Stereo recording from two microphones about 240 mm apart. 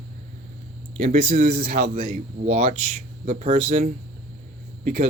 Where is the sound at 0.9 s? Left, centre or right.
Right.